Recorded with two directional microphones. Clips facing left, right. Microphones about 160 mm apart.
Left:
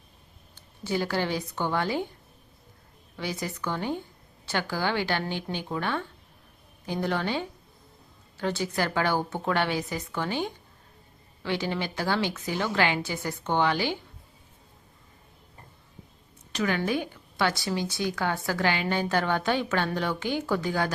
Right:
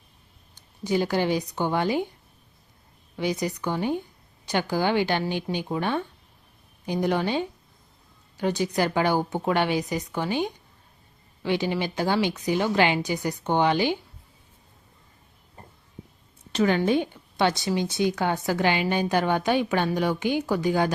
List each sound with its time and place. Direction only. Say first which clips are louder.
0.5 s speech: right 5 dB; 15° right (ahead or behind)
3.2 s a woman's voice: right 6 dB; 15° right (ahead or behind)
16.5 s a woman's voice: right 5 dB; 30° right (ahead or behind)